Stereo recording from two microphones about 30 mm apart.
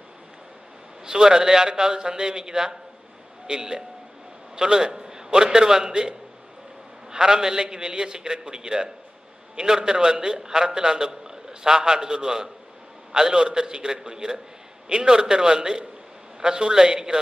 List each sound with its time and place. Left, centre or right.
1.0 s a man's voice: right